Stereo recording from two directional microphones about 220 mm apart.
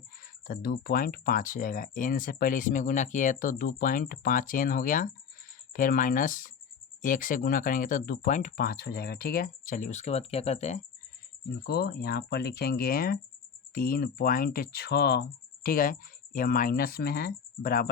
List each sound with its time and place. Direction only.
0.4 s speech: 40° left (ahead or behind)
11.6 s speech: 45° left (ahead or behind)